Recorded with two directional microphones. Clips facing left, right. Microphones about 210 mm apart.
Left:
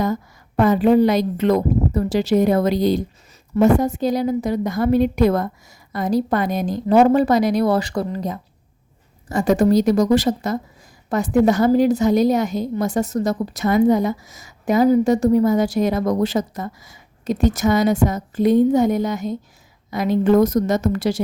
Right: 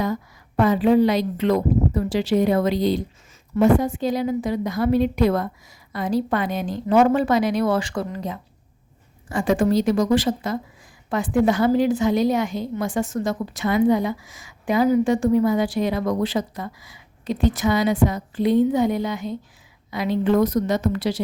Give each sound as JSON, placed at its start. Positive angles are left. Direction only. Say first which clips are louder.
{"t": 0.0, "sound": "a woman's voice", "louder": "left 3 dB", "side_deg": 45}